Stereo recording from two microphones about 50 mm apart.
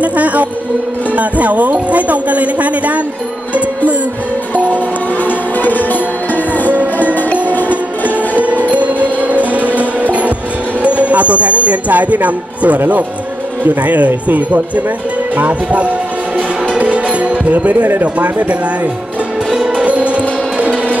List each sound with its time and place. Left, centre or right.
0.0 s music: right
1.1 s speech: right
5.2 s music: left
8.4 s music: right
10.8 s speech: right
16.3 s music: right
18.0 s speech: right
19.8 s music: right